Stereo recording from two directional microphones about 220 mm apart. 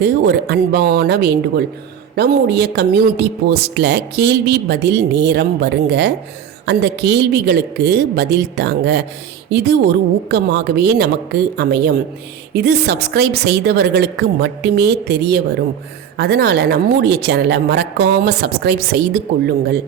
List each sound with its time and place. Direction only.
0.0 s speech: 50° right (ahead or behind)